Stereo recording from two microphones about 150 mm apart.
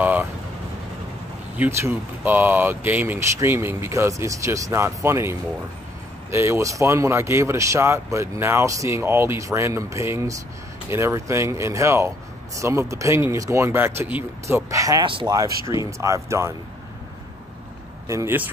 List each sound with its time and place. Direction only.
0.0 s vehicle: 10° right (ahead or behind)
1.6 s speech: 20° right (ahead or behind)
6.3 s speech: 15° right (ahead or behind)
18.0 s speech: 20° right (ahead or behind)